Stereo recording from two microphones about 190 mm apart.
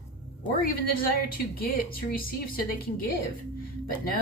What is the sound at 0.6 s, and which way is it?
A woman's voice, 50° left (ahead or behind).